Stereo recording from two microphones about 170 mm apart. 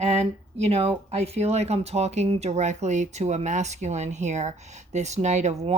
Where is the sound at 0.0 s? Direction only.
40° right (ahead or behind).